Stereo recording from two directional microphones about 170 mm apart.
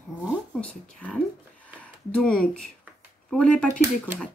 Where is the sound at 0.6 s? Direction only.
10° left (ahead or behind).